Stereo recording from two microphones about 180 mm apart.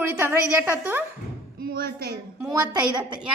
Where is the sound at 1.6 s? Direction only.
55° right (ahead or behind).